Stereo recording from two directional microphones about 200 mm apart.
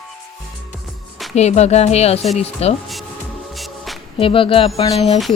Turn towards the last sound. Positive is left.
turn(degrees=30)  # may be behind; listen again after turning